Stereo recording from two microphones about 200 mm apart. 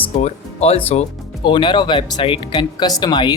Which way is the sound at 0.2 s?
35° left (ahead or behind).